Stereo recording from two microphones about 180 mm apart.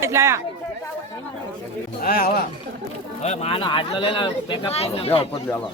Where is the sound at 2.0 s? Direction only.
55° left (ahead or behind).